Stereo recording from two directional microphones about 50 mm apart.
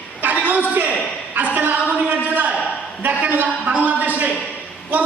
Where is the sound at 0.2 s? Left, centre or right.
Right.